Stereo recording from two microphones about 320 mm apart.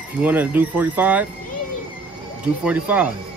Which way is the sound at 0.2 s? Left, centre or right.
Centre.